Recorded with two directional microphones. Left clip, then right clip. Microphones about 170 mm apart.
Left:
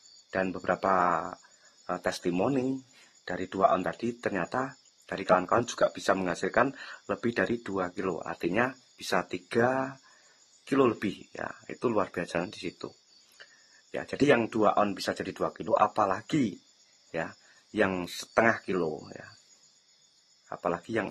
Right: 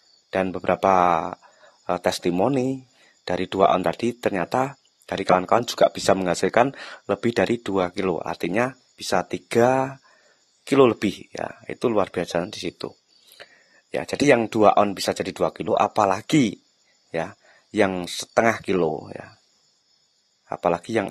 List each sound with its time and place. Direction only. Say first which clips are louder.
0.3 s speech: right 7 dB; 35° right (ahead or behind)
13.9 s speech: right 6 dB; 35° right (ahead or behind)
17.1 s speech: right 7 dB; 30° right (ahead or behind)
20.4 s speech: right 9 dB; 35° right (ahead or behind)